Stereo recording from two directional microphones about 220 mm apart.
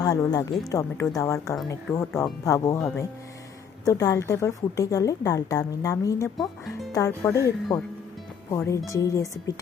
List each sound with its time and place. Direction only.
0.0 s a woman's voice: 15° left (ahead or behind)